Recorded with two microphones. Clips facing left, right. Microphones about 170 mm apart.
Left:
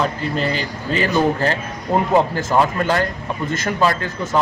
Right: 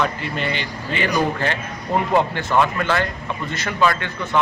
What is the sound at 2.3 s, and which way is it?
Speech, 40° left (ahead or behind).